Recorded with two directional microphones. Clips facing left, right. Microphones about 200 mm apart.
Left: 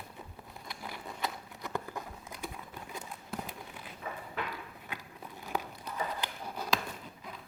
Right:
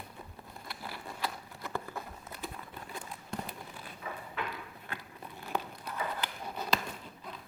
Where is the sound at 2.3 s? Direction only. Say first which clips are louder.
Even; 10° left (ahead or behind).